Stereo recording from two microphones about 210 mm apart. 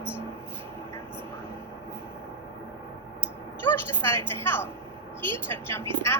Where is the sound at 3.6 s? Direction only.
10° left (ahead or behind).